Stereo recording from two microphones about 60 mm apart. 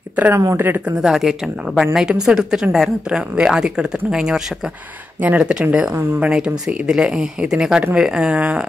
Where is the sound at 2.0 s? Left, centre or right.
Centre.